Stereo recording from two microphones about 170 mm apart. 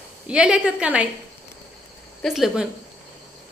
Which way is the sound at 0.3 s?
5° right (ahead or behind).